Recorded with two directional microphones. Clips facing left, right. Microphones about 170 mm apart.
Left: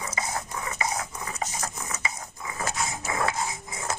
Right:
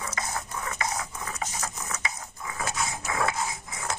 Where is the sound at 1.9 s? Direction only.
10° left (ahead or behind).